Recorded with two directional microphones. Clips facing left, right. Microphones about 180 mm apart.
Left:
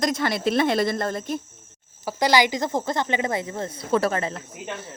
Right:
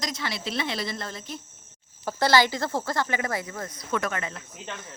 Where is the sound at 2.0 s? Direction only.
15° left (ahead or behind); by 4.4 s 35° left (ahead or behind).